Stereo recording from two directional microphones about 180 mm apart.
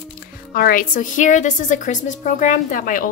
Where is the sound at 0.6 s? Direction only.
50° left (ahead or behind).